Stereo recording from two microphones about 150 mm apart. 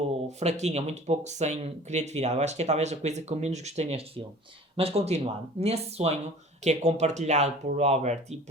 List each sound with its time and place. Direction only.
0.3 s speech: 50° right (ahead or behind)